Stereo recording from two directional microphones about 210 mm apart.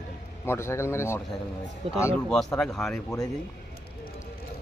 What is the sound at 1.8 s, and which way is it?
Speech, 30° right (ahead or behind).